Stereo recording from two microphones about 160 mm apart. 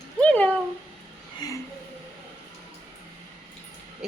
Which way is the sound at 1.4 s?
25° left (ahead or behind).